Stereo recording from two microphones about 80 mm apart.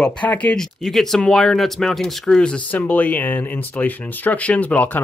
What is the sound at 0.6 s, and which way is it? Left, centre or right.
Speech, centre.